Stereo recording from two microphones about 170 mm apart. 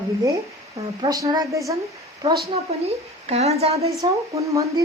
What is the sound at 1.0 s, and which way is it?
Speech, 25° right (ahead or behind).